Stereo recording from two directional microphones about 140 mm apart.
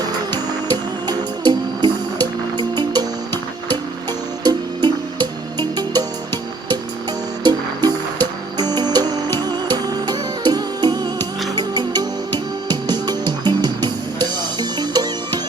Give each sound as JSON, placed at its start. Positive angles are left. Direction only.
{"t": 0.7, "sound": "music", "side_deg": -30}
{"t": 4.4, "sound": "music", "side_deg": -30}
{"t": 7.4, "sound": "music", "side_deg": -30}